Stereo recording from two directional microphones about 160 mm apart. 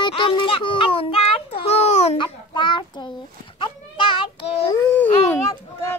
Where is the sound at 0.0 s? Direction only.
30° left (ahead or behind).